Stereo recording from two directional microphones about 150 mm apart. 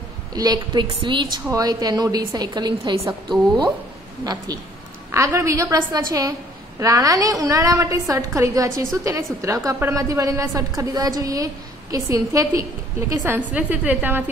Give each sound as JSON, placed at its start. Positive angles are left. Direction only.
{"t": 0.3, "sound": "a woman's voice", "side_deg": -25}